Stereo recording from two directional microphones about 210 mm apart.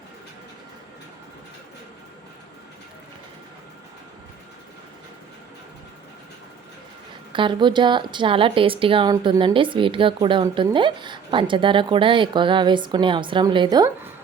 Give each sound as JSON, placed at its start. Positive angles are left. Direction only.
{"t": 7.3, "sound": "a woman's voice", "side_deg": -20}